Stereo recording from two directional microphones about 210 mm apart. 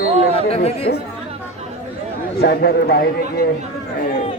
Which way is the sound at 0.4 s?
30° left (ahead or behind).